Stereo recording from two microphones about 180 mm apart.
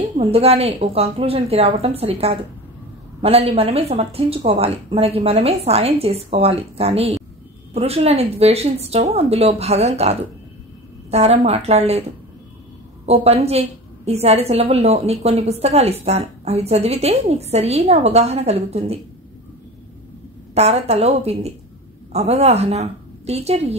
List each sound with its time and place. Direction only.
0.2 s a woman's voice: 35° right (ahead or behind)
13.0 s a woman's voice: 35° right (ahead or behind)
20.5 s a woman's voice: 35° right (ahead or behind)